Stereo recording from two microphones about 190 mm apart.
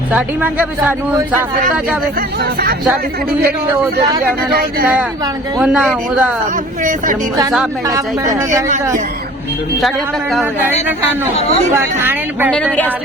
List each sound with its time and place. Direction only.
0.1 s speech: 10° right (ahead or behind)
2.4 s speech: 55° right (ahead or behind)
5.5 s a man's voice: 5° right (ahead or behind)
6.8 s speech: 45° right (ahead or behind)
11.9 s speech: 10° right (ahead or behind)
12.5 s speech: 5° left (ahead or behind)